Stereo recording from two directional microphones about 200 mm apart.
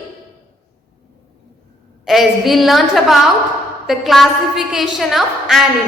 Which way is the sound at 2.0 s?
Centre (ahead or behind).